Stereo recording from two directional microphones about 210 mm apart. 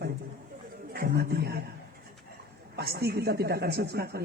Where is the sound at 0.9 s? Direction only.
50° right (ahead or behind).